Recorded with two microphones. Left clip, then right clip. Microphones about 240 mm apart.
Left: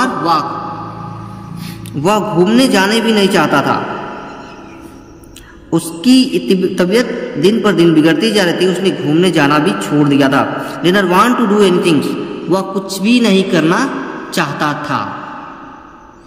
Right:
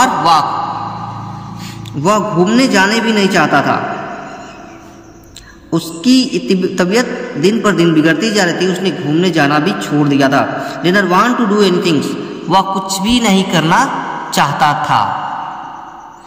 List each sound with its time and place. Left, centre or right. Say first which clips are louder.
0.0 s a sound: right 4 dB; centre
2.0 s a man's voice: even; centre
5.7 s a man's voice: left 1 dB; centre
12.4 s a man's voice: right 5 dB; centre